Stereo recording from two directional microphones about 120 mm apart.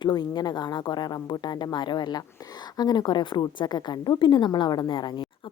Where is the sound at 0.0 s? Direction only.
40° left (ahead or behind).